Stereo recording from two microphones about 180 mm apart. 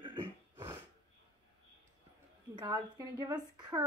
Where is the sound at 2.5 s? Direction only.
25° right (ahead or behind).